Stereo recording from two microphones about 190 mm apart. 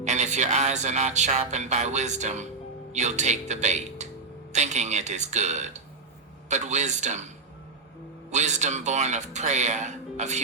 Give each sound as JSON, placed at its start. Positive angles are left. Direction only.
{"t": 0.0, "sound": "speech", "side_deg": -40}
{"t": 8.3, "sound": "speech", "side_deg": -40}